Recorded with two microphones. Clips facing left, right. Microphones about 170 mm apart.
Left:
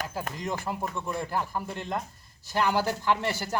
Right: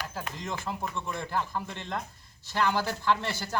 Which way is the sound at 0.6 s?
10° left (ahead or behind).